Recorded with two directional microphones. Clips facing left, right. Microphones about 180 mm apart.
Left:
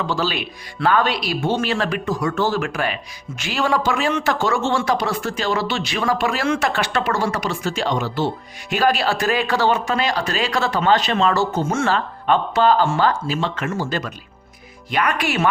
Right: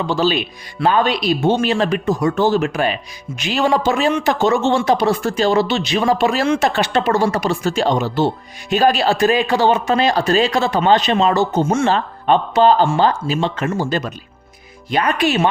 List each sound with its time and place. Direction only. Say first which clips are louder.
0.1 s speech: right 5 dB; 20° right (ahead or behind)
10.5 s speech: right 3 dB; 20° right (ahead or behind)